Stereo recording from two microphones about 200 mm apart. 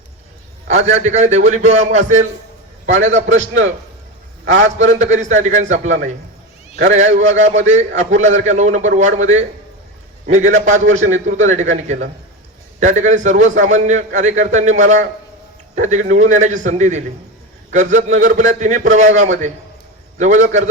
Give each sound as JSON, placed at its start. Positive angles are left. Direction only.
{"t": 0.9, "sound": "a man's voice", "side_deg": -35}
{"t": 4.8, "sound": "a man's voice", "side_deg": -35}